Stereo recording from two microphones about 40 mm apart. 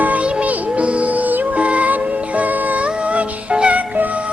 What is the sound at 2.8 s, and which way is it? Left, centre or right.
Music, right.